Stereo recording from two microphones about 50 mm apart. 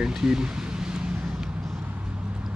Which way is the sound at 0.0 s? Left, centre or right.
Centre.